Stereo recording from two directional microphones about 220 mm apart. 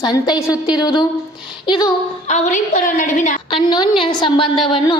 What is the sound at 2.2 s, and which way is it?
A woman's voice, 30° left (ahead or behind).